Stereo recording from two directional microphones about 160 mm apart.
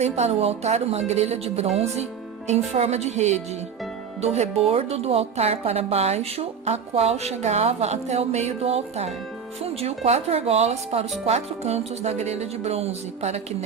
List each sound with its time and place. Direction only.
0.0 s a woman's voice: 40° right (ahead or behind)